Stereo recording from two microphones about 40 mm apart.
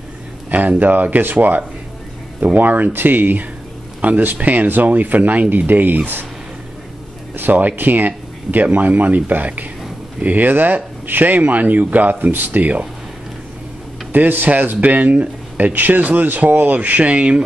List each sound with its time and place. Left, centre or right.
0.5 s speech: right
7.3 s speech: right
14.1 s speech: right